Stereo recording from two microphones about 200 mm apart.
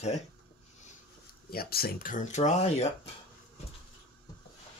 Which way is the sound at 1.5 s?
50° left (ahead or behind).